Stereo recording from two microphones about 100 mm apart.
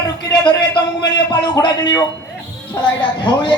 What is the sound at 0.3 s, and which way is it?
A man's voice, 50° left (ahead or behind).